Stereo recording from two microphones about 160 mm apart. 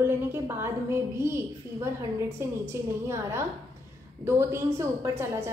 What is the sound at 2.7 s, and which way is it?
A woman's voice, 15° right (ahead or behind).